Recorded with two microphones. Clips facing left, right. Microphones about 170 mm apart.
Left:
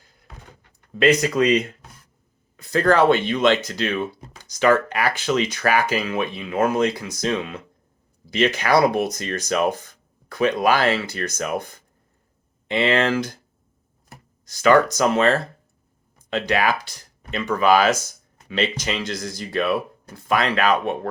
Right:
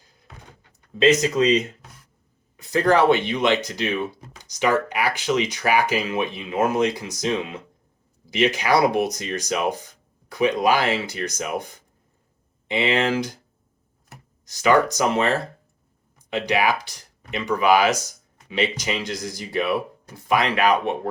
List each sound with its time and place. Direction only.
1.0 s speech: 20° right (ahead or behind)
2.6 s speech: 20° right (ahead or behind)
14.4 s speech: 15° right (ahead or behind)